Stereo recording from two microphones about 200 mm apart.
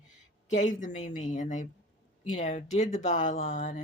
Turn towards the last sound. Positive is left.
turn(degrees=40)  # may be behind; listen again after turning